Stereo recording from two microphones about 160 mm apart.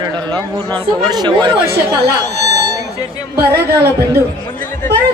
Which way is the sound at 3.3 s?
80° right.